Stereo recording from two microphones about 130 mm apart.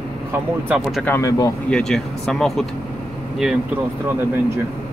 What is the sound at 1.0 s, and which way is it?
Speech, 15° left (ahead or behind).